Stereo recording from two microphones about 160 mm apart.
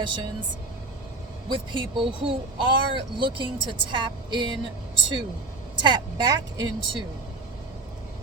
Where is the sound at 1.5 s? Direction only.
30° right (ahead or behind).